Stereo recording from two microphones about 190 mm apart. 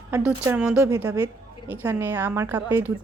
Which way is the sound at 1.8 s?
10° right (ahead or behind).